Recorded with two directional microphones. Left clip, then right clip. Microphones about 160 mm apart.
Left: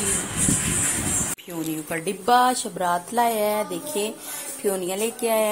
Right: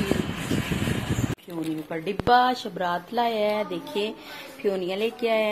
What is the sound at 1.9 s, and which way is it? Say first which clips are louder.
A woman's voice: left 1 dB; 20° left (ahead or behind).